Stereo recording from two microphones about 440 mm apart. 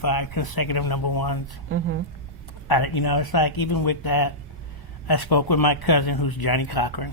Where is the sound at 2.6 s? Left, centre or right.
Left.